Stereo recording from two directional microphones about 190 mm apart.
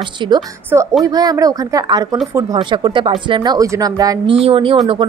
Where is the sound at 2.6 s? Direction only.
25° right (ahead or behind).